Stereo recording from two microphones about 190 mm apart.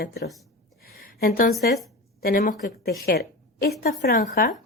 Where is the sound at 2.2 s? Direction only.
45° left (ahead or behind).